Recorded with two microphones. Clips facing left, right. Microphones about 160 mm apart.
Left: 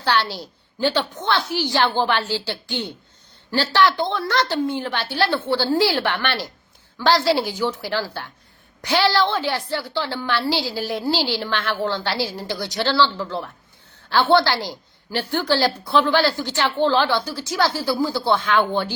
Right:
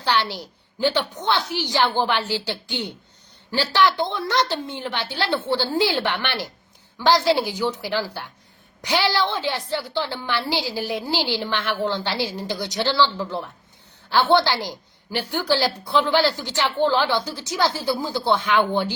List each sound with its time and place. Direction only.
0.0 s a woman's voice: 15° right (ahead or behind)